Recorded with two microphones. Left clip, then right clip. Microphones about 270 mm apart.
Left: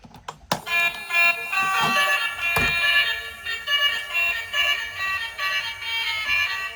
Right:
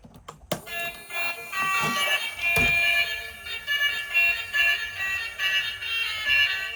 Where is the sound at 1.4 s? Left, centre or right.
Left.